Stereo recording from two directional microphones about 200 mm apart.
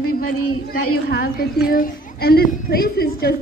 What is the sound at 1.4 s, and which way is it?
A woman's voice, 50° left (ahead or behind).